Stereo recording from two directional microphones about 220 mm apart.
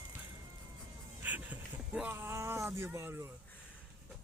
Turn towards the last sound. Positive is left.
turn(degrees=-10)  # may be behind; listen again after turning